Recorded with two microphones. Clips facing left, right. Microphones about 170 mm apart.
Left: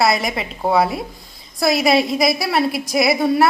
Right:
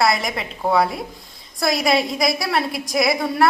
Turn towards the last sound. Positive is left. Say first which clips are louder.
# left 3 dB
turn(degrees=0)  # may be behind; listen again after turning